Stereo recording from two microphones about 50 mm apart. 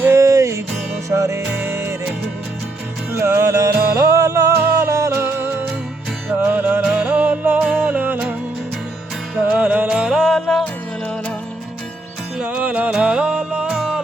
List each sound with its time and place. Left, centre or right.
0.1 s music: right
1.1 s music: right
1.5 s music: right
3.2 s music: right
5.1 s music: right
6.6 s music: right
9.5 s music: right
9.8 s music: centre
10.2 s music: centre
12.5 s music: right
13.7 s music: centre